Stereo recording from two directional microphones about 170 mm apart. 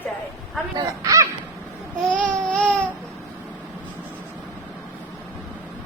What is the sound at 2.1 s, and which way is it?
Speech, 5° left (ahead or behind).